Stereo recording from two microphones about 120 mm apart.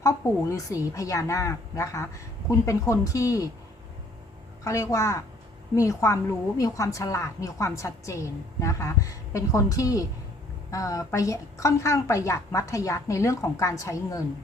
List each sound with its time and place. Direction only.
0.0 s a woman's voice: 25° left (ahead or behind)
4.6 s a woman's voice: 25° left (ahead or behind)